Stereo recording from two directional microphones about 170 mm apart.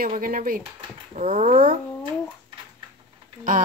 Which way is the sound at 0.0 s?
55° right (ahead or behind).